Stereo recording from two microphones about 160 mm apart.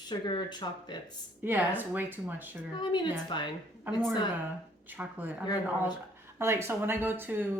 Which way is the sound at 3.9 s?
15° right (ahead or behind).